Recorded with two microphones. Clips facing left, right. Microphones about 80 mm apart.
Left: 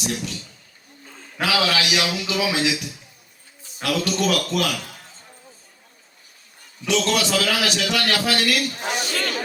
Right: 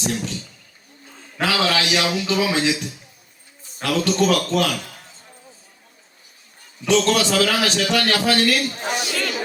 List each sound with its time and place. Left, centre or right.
1.4 s a man's voice: right
6.8 s a man's voice: right
9.0 s a sound: left